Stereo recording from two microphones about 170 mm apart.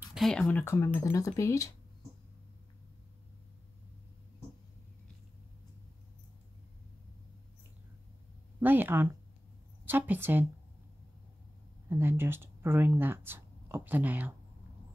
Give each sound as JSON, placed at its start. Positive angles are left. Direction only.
{"t": 0.1, "sound": "speech", "side_deg": 0}
{"t": 8.5, "sound": "speech", "side_deg": -10}
{"t": 11.9, "sound": "speech", "side_deg": -15}